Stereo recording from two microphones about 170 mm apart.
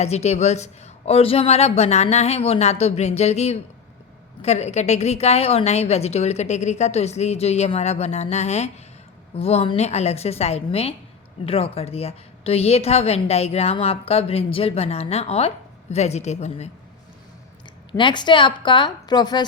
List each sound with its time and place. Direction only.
0.0 s a woman's voice: 40° left (ahead or behind)
17.9 s a woman's voice: 25° left (ahead or behind)